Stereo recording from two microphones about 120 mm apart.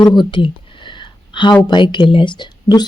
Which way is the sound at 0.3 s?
45° left (ahead or behind).